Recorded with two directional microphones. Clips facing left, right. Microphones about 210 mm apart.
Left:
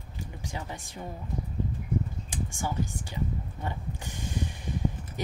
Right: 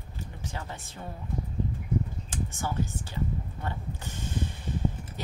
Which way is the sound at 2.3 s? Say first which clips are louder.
Even; 15° left (ahead or behind).